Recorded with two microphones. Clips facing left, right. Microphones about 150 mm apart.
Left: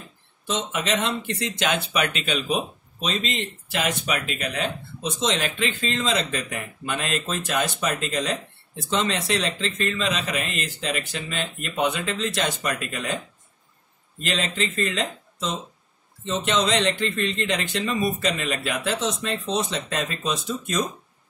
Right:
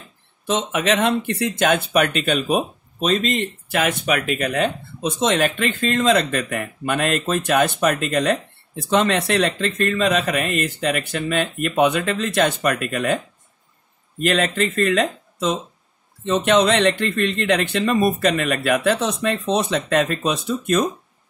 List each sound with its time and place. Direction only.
0.5 s speech: 55° right (ahead or behind)
14.2 s speech: 60° right (ahead or behind)